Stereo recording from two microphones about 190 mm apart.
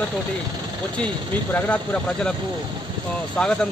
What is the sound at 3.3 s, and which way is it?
Speech, 5° left (ahead or behind).